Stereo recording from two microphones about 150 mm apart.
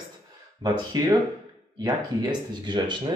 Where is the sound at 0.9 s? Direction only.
25° right (ahead or behind).